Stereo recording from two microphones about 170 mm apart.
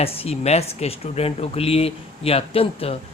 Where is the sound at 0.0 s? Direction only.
35° left (ahead or behind).